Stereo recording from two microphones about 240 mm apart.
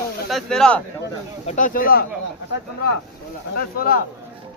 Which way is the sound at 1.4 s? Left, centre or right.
Left.